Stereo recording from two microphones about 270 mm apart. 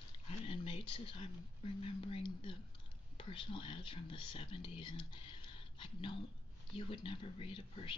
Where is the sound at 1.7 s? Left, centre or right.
Centre.